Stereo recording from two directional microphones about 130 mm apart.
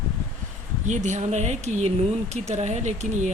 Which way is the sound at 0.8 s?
65° right (ahead or behind).